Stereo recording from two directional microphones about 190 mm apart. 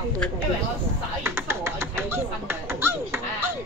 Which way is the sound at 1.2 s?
15° right (ahead or behind).